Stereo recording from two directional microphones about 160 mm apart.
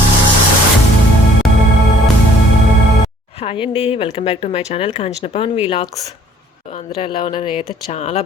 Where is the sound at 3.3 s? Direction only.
35° left (ahead or behind).